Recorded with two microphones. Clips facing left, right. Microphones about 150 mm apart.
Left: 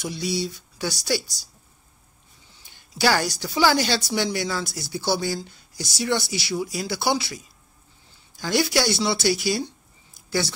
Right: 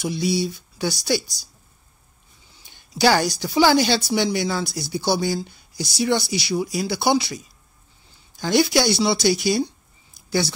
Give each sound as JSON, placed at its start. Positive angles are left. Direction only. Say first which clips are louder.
{"t": 0.0, "sound": "speech", "louder": "right 4 dB", "side_deg": -10}
{"t": 3.0, "sound": "a woman's voice", "louder": "right 4 dB", "side_deg": -20}
{"t": 8.4, "sound": "speech", "louder": "right 4 dB", "side_deg": -20}